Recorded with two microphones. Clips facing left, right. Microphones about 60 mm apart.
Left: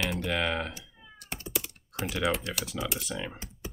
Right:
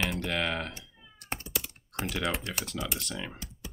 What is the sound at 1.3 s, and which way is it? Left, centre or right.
Meow, right.